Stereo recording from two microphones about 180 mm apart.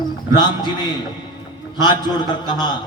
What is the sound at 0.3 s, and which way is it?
A man's voice, 25° left (ahead or behind).